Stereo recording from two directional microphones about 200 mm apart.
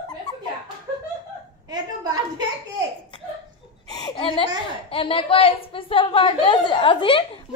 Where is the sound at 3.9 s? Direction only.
20° left (ahead or behind).